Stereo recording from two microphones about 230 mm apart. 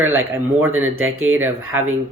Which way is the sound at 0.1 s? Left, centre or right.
Right.